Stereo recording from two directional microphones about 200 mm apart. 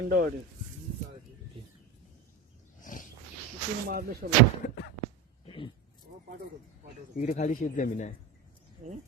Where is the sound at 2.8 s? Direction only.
40° left (ahead or behind).